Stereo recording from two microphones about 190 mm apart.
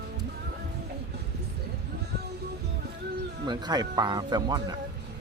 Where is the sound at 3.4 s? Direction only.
20° right (ahead or behind).